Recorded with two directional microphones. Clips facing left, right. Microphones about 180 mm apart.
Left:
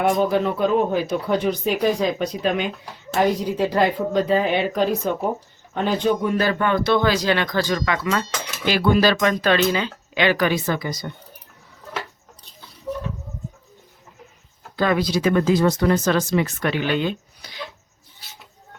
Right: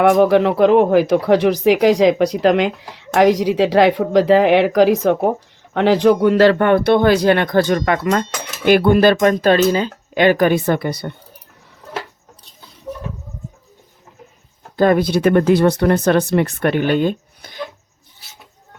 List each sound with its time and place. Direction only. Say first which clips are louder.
0.1 s speech: right 7 dB; 75° right (ahead or behind); by 11.1 s 60° right (ahead or behind)
14.8 s speech: right 6 dB; 50° right (ahead or behind)